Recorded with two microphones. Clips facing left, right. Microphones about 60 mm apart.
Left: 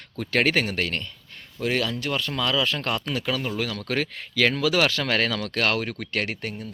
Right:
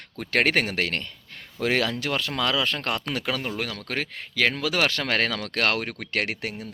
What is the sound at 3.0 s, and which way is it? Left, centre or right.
Speech, right.